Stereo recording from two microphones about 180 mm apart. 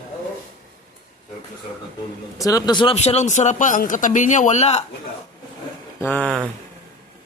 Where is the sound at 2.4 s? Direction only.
20° left (ahead or behind); by 4.9 s 35° left (ahead or behind).